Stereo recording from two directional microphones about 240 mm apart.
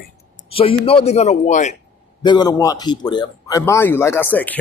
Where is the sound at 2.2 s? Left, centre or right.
Centre.